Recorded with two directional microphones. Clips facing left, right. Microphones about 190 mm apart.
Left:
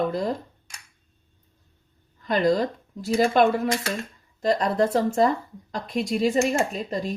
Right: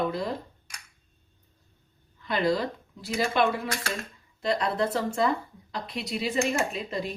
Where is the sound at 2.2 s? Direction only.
45° left (ahead or behind).